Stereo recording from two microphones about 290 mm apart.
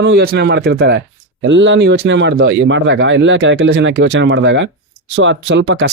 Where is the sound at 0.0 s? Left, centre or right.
Right.